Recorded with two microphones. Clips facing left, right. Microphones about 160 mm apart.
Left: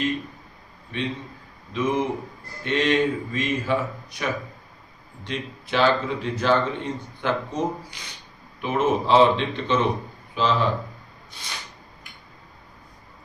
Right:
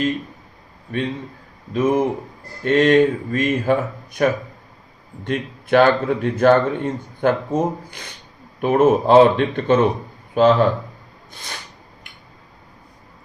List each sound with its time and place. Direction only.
1.7 s speech: 50° right (ahead or behind)